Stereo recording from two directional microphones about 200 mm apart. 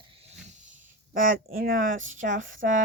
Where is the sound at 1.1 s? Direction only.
45° right (ahead or behind).